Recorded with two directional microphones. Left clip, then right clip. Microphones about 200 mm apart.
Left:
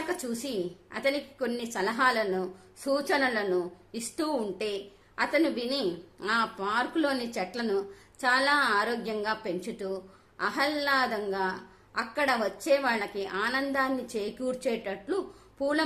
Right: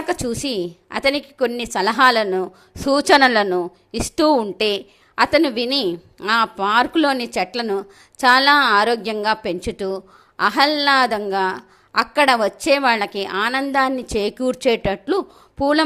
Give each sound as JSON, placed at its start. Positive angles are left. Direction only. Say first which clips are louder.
{"t": 0.1, "sound": "a woman's voice", "louder": "right 11 dB", "side_deg": -35}